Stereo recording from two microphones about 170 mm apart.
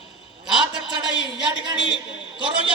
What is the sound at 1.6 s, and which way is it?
Speech, 30° right (ahead or behind).